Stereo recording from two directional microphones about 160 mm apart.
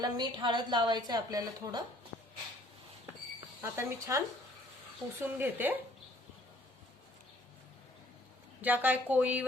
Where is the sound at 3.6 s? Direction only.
15° right (ahead or behind).